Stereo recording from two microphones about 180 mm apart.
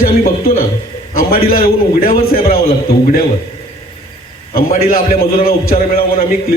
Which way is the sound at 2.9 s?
55° left (ahead or behind).